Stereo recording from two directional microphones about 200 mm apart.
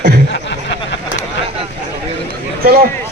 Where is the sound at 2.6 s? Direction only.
45° right (ahead or behind).